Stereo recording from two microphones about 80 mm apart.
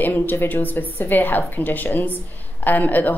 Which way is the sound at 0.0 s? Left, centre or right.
Left.